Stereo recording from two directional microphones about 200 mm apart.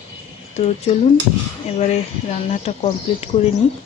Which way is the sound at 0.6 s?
30° left (ahead or behind).